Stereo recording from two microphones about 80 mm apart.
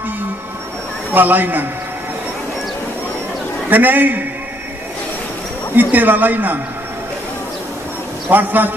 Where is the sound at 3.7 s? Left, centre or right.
Right.